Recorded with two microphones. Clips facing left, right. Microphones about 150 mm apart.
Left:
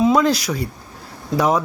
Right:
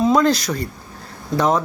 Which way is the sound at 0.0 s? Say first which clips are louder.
Even; 5° left (ahead or behind).